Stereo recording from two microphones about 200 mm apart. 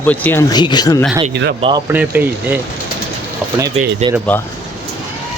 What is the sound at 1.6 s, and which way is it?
Speech, 25° right (ahead or behind).